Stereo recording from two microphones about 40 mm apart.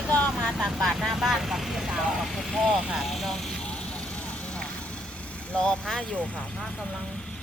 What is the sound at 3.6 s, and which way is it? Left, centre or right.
Vehicle, left.